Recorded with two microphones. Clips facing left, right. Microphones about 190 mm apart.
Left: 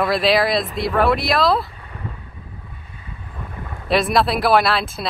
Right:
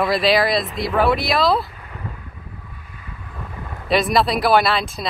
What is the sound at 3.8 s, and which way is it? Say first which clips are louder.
Speech: even; centre (ahead or behind).